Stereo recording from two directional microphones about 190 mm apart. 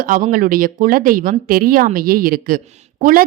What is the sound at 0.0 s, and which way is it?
A woman's voice, 45° right (ahead or behind).